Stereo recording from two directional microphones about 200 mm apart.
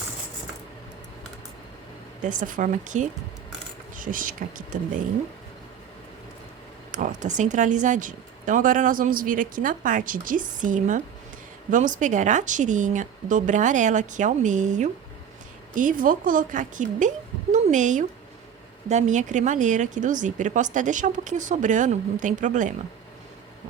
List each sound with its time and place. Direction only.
2.2 s speech: 40° right (ahead or behind)
6.9 s a woman's voice: 40° right (ahead or behind)